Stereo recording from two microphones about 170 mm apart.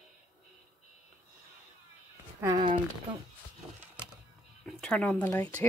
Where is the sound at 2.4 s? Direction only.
25° right (ahead or behind).